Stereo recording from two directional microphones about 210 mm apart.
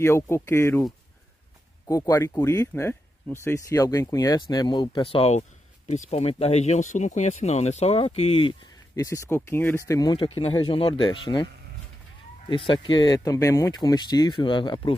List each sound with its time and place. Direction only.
0.0 s speech: 10° left (ahead or behind)
1.9 s speech: 15° left (ahead or behind)
12.4 s speech: 25° left (ahead or behind)